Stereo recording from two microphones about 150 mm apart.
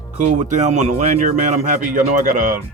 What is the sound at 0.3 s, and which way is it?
Speech, 55° right (ahead or behind).